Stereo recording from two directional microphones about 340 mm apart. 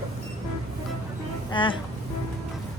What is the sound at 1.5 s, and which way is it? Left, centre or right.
Speech, centre.